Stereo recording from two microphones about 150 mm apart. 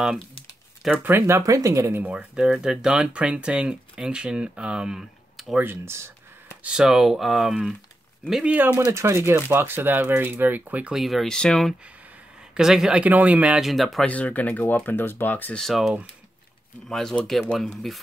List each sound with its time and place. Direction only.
0.8 s speech: 10° right (ahead or behind)
5.7 s speech: 15° right (ahead or behind)
6.6 s speech: 5° right (ahead or behind)